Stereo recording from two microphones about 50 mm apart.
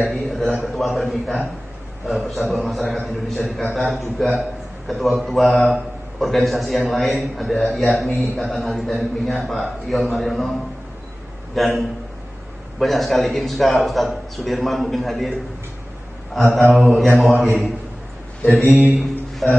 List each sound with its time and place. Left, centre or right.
0.0 s a sound: centre
0.7 s a man's voice: centre
11.5 s a man's voice: centre
16.3 s a man's voice: centre
19.4 s speech: centre